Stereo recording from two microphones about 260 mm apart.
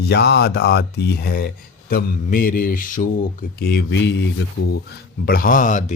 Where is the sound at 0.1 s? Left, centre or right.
Left.